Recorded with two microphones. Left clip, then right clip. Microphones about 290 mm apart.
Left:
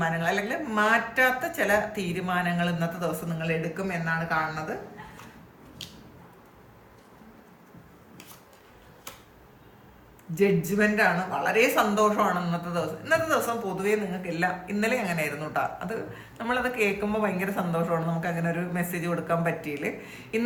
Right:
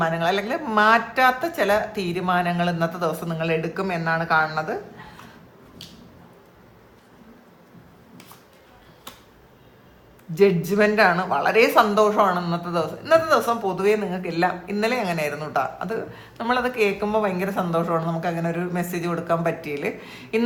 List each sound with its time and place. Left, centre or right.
0.0 s speech: centre
10.7 s speech: centre